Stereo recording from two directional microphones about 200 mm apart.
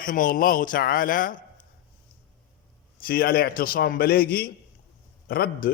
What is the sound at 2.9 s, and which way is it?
A man's voice, 50° left (ahead or behind).